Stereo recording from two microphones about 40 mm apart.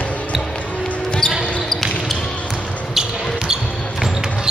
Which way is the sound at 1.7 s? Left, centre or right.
Centre.